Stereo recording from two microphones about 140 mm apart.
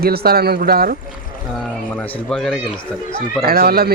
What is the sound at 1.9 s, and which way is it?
Speech, 10° left (ahead or behind).